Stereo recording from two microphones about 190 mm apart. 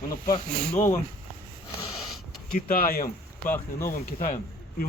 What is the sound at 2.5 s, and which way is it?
Speech, 50° left (ahead or behind).